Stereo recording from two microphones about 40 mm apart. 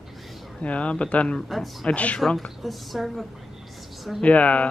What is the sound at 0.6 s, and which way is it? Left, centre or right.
Speech, left.